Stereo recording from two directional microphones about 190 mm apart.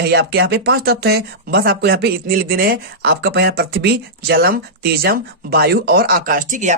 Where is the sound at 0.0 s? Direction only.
60° right (ahead or behind).